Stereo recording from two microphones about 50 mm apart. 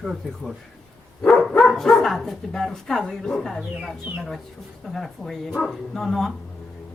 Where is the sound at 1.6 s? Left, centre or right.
Centre.